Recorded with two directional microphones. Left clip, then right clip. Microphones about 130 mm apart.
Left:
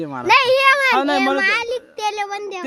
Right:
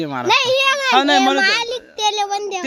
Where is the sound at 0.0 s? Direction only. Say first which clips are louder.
Right 4 dB; 5° right (ahead or behind).